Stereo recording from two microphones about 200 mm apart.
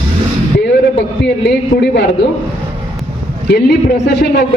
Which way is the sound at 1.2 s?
55° left (ahead or behind).